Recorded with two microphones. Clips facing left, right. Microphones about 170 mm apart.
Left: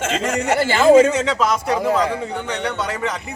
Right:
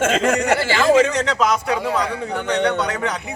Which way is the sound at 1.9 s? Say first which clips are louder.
Left 3 dB; 30° left (ahead or behind).